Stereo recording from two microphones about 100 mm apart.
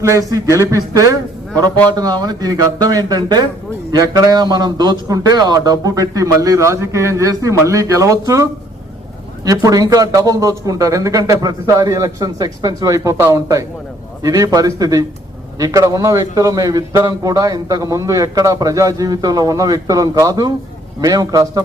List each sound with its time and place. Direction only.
0.1 s a man's voice: 35° right (ahead or behind)